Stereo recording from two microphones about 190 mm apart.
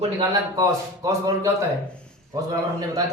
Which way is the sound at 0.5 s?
15° right (ahead or behind).